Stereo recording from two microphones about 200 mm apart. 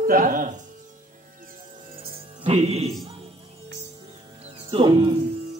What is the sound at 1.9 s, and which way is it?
Music, 25° right (ahead or behind).